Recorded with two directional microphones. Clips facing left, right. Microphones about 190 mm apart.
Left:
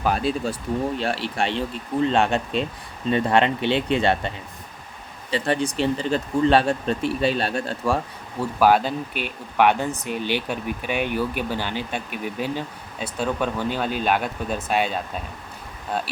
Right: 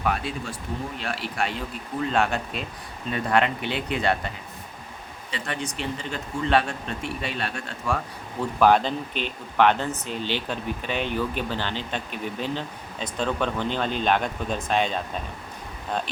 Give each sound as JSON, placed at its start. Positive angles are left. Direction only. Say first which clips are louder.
{"t": 0.0, "sound": "speech", "louder": "left 5 dB", "side_deg": 35}
{"t": 5.3, "sound": "speech", "louder": "left 9 dB", "side_deg": 35}
{"t": 8.5, "sound": "speech", "louder": "left 1 dB", "side_deg": 5}